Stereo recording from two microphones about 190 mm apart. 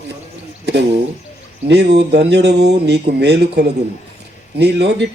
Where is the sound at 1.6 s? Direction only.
60° right (ahead or behind).